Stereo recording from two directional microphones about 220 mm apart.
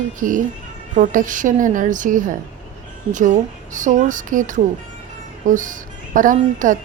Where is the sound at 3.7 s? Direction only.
35° right (ahead or behind).